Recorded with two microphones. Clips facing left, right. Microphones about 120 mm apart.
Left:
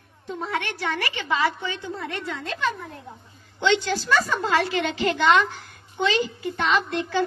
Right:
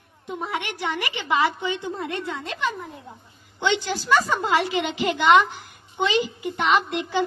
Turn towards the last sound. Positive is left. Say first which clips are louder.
# right 1 dB
turn(degrees=-15)  # may be behind; listen again after turning